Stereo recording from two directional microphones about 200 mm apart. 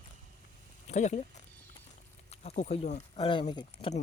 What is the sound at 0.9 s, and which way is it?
Speech, 35° left (ahead or behind).